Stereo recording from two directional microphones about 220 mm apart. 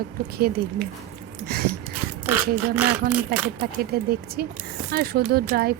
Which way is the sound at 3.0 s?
45° right (ahead or behind).